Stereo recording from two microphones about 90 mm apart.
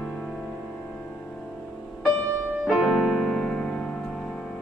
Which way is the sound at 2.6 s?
Centre (ahead or behind).